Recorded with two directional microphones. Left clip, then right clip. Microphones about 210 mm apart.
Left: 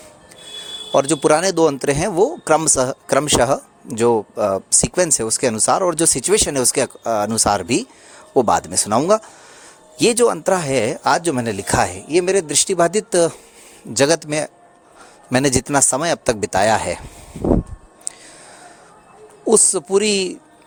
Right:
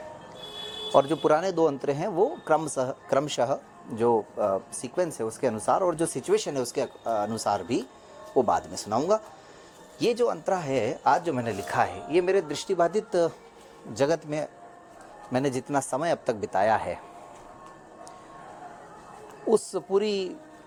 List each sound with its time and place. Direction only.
0.9 s speech: 55° left (ahead or behind)
19.5 s speech: 55° left (ahead or behind)